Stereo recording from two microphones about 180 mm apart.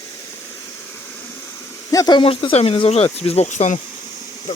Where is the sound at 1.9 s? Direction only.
25° left (ahead or behind).